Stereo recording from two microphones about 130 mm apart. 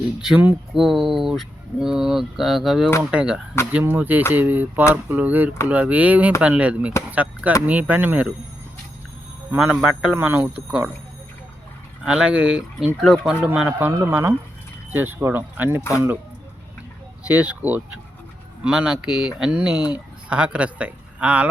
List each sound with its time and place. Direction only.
0.2 s speech: 5° right (ahead or behind)
9.5 s speech: 15° right (ahead or behind)
12.0 s speech: 5° right (ahead or behind)
17.2 s speech: 10° right (ahead or behind)